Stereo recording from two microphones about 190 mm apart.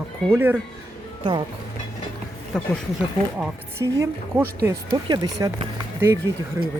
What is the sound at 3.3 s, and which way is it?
Speech, 10° right (ahead or behind).